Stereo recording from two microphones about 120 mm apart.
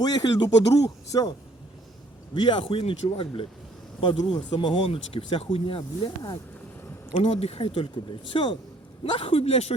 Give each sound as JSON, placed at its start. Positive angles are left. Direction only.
{"t": 0.0, "sound": "speech", "side_deg": 35}
{"t": 2.3, "sound": "speech", "side_deg": 45}
{"t": 7.1, "sound": "speech", "side_deg": 55}